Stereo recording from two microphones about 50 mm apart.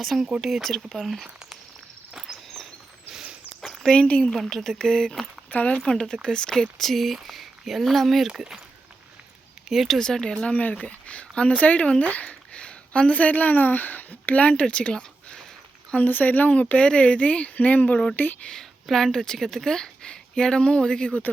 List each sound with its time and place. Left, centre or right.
0.0 s speech: centre
2.1 s a sound: centre
3.5 s a sound: centre
3.9 s speech: left
4.4 s speech: centre
5.5 s speech: left
5.8 s speech: centre
9.6 s speech: centre
10.0 s speech: centre
10.4 s speech: left
18.9 s speech: centre